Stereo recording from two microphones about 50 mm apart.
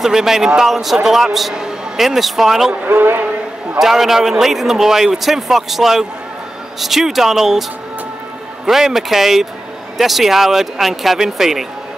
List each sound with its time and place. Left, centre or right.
0.0 s a man's voice: centre
2.9 s a man's voice: right
3.7 s a man's voice: centre
8.6 s speech: centre